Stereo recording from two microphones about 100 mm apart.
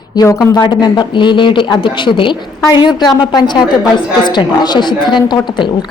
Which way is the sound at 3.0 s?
45° left (ahead or behind).